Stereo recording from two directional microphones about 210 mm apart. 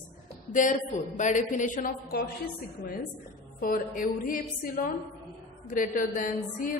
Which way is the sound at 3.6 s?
45° left (ahead or behind).